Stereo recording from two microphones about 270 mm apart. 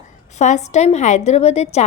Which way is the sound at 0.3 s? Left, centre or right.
Left.